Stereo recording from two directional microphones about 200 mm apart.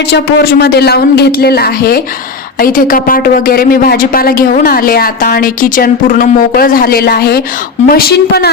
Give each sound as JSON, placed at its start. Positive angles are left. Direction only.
{"t": 0.1, "sound": "speech", "side_deg": 55}